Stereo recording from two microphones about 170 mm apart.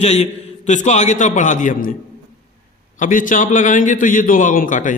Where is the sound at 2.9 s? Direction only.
50° left (ahead or behind).